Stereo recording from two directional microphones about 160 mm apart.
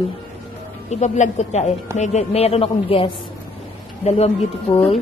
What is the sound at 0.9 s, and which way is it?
A woman's voice, 45° left (ahead or behind).